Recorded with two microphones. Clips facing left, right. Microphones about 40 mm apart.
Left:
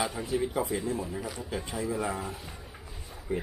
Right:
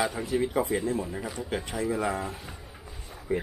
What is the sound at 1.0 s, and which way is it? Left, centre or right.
Speech, right.